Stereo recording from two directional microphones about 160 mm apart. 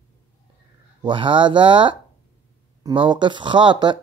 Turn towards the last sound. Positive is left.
turn(degrees=-30)  # may be behind; listen again after turning